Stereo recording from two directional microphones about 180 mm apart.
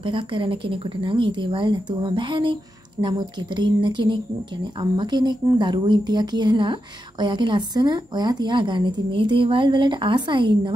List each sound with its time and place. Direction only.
0.0 s a woman's voice: 30° right (ahead or behind)